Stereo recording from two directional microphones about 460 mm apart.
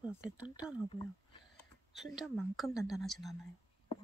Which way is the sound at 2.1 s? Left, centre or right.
Centre.